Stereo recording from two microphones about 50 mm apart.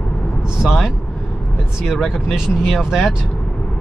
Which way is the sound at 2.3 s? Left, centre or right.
Centre.